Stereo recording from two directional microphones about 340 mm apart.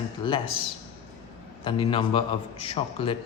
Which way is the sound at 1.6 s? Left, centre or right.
Centre.